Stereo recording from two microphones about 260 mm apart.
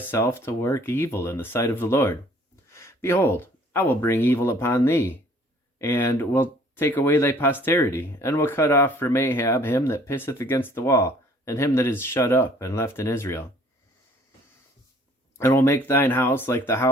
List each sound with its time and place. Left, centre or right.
0.1 s speech: centre
15.4 s speech: centre